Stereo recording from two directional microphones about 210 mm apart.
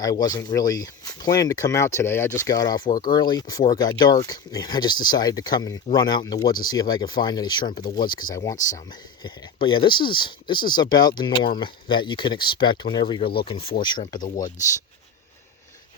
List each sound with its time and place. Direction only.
0.0 s speech: 15° left (ahead or behind)
2.8 s speech: 40° left (ahead or behind)
3.1 s speech: 20° left (ahead or behind)
14.2 s speech: 40° left (ahead or behind)